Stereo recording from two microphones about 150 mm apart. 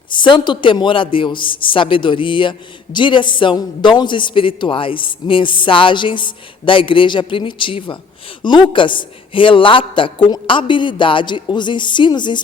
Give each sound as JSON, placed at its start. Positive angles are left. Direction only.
{"t": 0.1, "sound": "a man's voice", "side_deg": 30}